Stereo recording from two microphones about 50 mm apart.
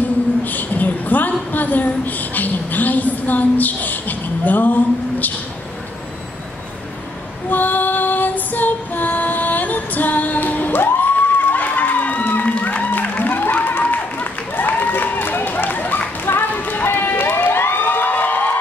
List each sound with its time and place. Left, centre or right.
0.5 s a sound: left
7.4 s female singing: left
12.6 s music: left
16.3 s crowd: left